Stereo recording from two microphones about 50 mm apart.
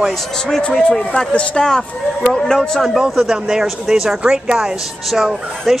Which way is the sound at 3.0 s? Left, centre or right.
Centre.